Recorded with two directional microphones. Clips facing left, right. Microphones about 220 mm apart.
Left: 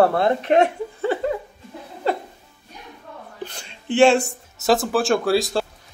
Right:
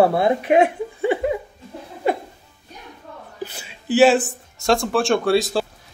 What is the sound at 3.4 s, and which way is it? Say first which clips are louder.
Speech: right 2 dB; 5° right (ahead or behind).